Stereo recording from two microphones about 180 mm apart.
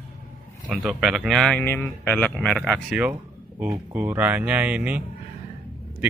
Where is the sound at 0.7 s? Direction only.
Centre (ahead or behind).